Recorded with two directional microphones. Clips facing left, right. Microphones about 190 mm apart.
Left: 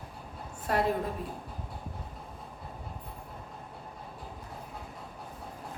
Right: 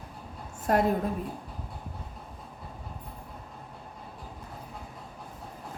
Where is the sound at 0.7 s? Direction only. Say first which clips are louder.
Right 4 dB; 45° right (ahead or behind).